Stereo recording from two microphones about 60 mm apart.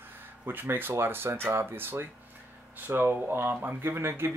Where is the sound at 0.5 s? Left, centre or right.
Right.